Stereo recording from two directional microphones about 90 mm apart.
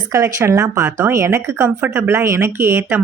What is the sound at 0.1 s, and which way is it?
Speech, 35° right (ahead or behind).